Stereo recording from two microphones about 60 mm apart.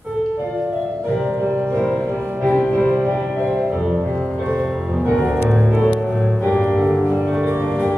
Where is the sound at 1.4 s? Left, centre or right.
Right.